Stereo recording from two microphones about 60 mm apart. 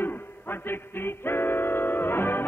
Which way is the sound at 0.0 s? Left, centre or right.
Left.